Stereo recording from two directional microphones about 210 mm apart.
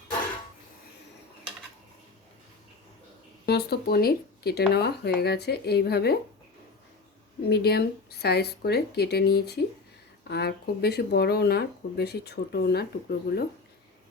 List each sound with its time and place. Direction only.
3.4 s speech: 50° left (ahead or behind)
7.5 s speech: 50° left (ahead or behind)